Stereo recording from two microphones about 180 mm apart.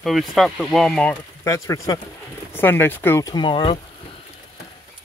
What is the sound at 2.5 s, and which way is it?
Speech, 10° left (ahead or behind).